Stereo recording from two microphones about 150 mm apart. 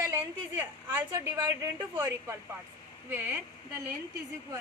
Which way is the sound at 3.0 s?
15° right (ahead or behind).